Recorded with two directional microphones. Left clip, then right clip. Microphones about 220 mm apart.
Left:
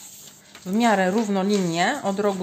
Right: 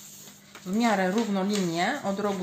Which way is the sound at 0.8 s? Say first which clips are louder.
Left 5 dB; 50° left (ahead or behind).